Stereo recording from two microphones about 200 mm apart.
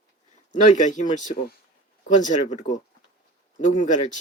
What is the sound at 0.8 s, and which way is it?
Speech, 40° left (ahead or behind).